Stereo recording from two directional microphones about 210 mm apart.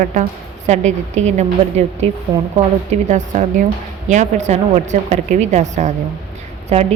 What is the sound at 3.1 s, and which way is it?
A woman's voice, 35° right (ahead or behind).